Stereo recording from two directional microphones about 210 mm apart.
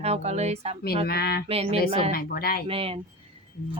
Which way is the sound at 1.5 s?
30° right (ahead or behind).